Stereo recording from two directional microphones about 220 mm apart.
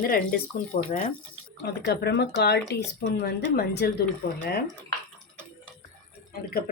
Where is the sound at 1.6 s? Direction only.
50° left (ahead or behind).